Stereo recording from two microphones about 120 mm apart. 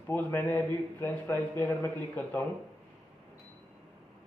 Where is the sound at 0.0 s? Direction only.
15° left (ahead or behind).